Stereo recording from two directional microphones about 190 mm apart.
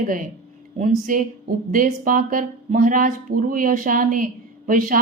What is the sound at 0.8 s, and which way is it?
Speech, 45° right (ahead or behind).